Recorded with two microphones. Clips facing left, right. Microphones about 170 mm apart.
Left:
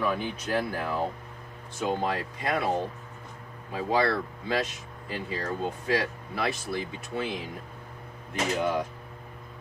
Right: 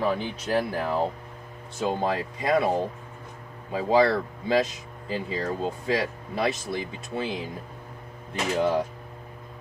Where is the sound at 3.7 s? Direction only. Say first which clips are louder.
Right 5 dB; 25° right (ahead or behind).